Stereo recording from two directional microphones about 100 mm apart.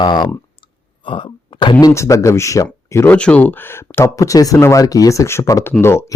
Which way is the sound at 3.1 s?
15° left (ahead or behind).